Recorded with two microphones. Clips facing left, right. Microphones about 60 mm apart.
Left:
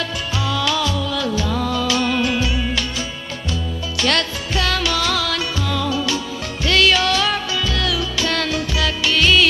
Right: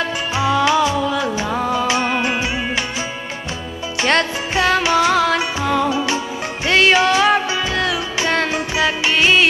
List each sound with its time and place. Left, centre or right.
0.4 s music: right
4.0 s music: right